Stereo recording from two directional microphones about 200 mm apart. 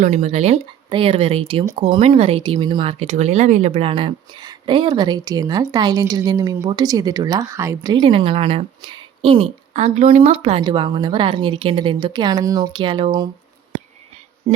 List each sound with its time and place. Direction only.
0.0 s speech: 35° right (ahead or behind)